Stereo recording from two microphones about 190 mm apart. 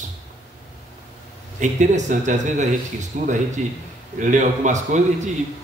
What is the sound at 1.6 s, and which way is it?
Speech, 40° right (ahead or behind).